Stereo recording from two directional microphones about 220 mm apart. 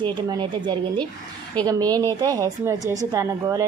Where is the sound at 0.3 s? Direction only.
20° right (ahead or behind).